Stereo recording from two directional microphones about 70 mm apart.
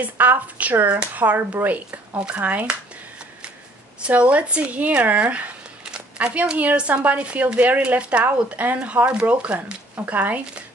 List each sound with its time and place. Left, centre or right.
0.0 s speech: right
4.0 s speech: centre